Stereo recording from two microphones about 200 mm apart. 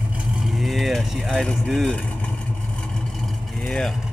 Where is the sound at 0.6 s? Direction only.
Centre (ahead or behind).